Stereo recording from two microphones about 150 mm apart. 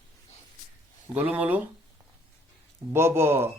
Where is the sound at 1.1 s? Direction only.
10° right (ahead or behind).